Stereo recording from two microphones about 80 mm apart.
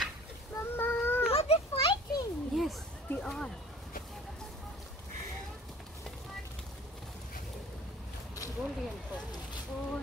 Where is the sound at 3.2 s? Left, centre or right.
Centre.